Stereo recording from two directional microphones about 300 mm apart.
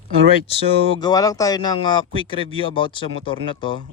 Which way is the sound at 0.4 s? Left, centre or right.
Centre.